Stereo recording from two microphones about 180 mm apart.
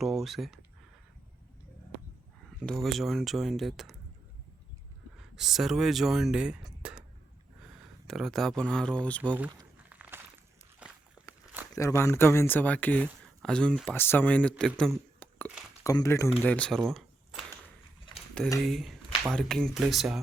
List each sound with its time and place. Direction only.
0.0 s speech: centre (ahead or behind)
2.6 s speech: centre (ahead or behind)
5.4 s speech: centre (ahead or behind)
9.3 s a sound: 10° right (ahead or behind)
11.7 s speech: 15° left (ahead or behind)
14.6 s a sound: 5° left (ahead or behind)
15.8 s speech: 20° left (ahead or behind); by 17.4 s centre (ahead or behind)
18.6 s speech: centre (ahead or behind)